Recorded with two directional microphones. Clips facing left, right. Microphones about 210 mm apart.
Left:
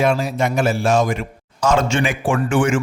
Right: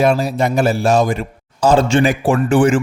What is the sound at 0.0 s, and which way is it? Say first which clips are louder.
Speech: right 3 dB; 35° right (ahead or behind).